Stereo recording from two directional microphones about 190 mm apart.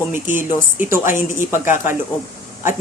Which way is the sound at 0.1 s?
10° right (ahead or behind).